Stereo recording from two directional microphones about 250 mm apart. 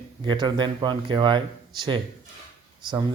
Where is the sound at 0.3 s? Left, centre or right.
Centre.